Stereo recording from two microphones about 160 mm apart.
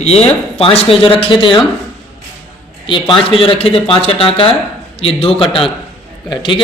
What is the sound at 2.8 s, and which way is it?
Speech, 30° left (ahead or behind).